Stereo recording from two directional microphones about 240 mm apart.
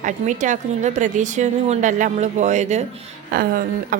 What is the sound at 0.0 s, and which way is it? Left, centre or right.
Speech, right.